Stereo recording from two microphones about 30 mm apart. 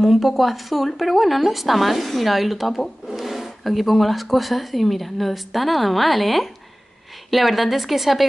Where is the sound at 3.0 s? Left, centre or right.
Centre.